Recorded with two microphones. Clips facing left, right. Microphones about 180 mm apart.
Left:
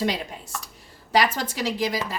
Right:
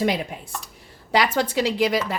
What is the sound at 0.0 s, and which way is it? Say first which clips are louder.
A woman's voice: right 3 dB; 55° right (ahead or behind).